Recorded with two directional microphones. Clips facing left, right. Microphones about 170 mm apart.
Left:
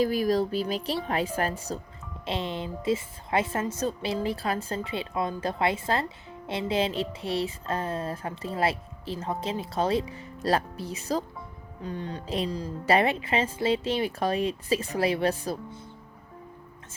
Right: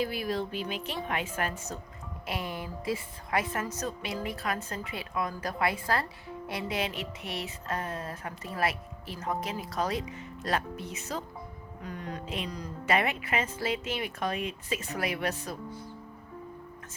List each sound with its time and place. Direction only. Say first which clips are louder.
0.0 s a woman's voice: left 7 dB; 40° left (ahead or behind)
2.2 s a sound: left 5 dB; 25° left (ahead or behind)
11.8 s a woman's voice: left 4 dB; 30° left (ahead or behind)